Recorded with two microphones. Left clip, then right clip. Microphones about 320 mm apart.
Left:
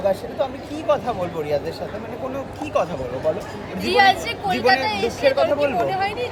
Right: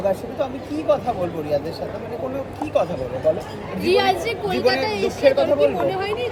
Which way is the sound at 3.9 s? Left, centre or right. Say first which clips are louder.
Left 2 dB; centre.